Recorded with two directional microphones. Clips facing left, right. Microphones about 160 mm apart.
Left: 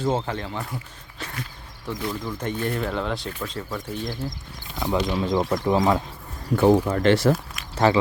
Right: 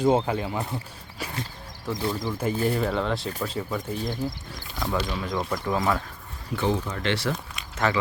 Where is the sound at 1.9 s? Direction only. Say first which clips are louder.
Right 1 dB; 35° right (ahead or behind).